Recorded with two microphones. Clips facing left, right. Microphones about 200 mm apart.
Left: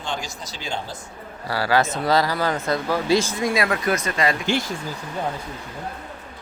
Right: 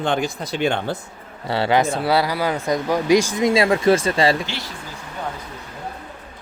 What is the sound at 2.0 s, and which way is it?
Speech, 10° right (ahead or behind).